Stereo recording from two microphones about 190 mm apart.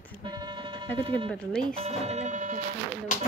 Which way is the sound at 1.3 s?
5° left (ahead or behind).